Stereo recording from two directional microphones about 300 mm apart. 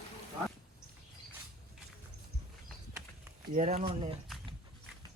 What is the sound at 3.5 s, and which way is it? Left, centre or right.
Speech, right.